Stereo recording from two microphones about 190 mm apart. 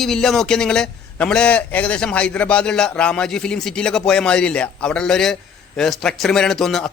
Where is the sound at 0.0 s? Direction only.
Centre (ahead or behind).